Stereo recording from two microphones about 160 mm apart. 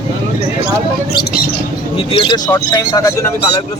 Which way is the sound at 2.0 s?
30° left (ahead or behind).